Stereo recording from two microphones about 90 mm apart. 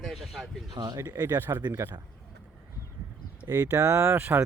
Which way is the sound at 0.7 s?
50° right (ahead or behind).